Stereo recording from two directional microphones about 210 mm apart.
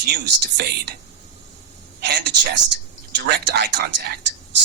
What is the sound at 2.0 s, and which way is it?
A man's voice, 55° right (ahead or behind).